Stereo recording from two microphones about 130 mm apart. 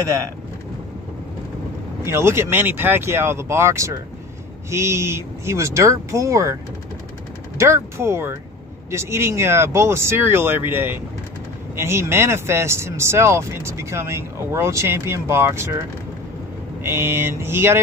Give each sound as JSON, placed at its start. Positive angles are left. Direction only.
{"t": 2.0, "sound": "speech", "side_deg": -20}
{"t": 16.8, "sound": "speech", "side_deg": -20}